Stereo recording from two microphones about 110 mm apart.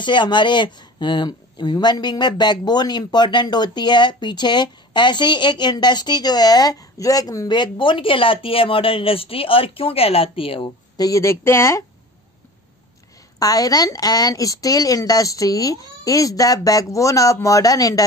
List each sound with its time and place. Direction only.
0.0 s speech: 45° left (ahead or behind)
11.0 s speech: 30° left (ahead or behind)
13.4 s a woman's voice: 35° left (ahead or behind)